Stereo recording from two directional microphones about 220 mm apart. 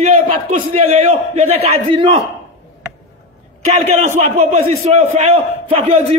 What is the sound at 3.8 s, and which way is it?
A man's voice, 35° right (ahead or behind).